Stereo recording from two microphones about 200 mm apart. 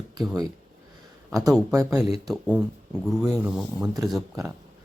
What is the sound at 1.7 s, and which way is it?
Speech, 15° right (ahead or behind).